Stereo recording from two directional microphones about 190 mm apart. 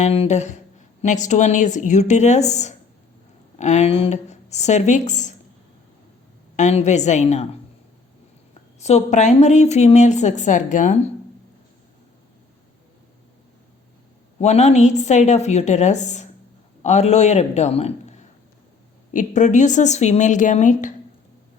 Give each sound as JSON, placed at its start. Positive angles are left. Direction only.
{"t": 0.0, "sound": "a woman's voice", "side_deg": 35}
{"t": 6.6, "sound": "a woman's voice", "side_deg": 35}
{"t": 8.8, "sound": "a woman's voice", "side_deg": 35}
{"t": 14.3, "sound": "a woman's voice", "side_deg": 35}